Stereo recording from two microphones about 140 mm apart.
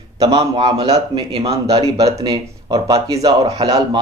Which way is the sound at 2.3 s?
25° right (ahead or behind).